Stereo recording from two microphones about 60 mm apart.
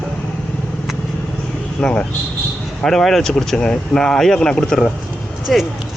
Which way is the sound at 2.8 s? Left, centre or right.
Centre.